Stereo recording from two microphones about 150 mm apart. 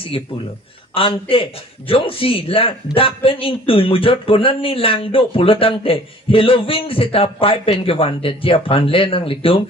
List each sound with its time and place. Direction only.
0.9 s a man's voice: 35° left (ahead or behind)